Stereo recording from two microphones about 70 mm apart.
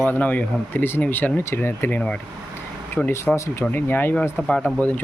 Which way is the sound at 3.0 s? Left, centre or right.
Centre.